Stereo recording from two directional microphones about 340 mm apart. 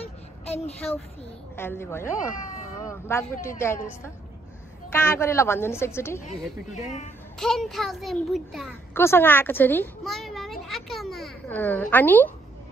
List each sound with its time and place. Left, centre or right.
0.0 s a sound: centre
1.6 s a woman's voice: centre
7.3 s a child's voice: centre